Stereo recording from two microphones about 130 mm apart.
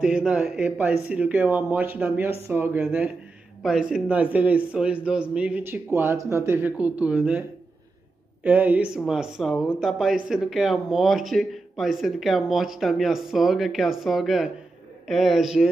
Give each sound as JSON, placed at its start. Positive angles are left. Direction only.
{"t": 0.0, "sound": "speech", "side_deg": -5}
{"t": 8.5, "sound": "speech", "side_deg": -10}